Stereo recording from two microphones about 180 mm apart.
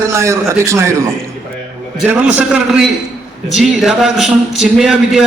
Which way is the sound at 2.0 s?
10° right (ahead or behind).